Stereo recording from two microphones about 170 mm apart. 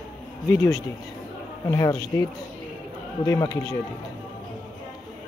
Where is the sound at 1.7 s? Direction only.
20° left (ahead or behind).